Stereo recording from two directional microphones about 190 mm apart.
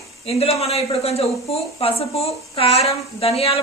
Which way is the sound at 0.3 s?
30° left (ahead or behind).